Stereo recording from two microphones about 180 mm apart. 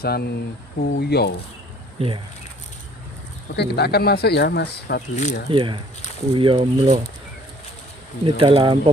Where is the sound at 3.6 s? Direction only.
65° left (ahead or behind).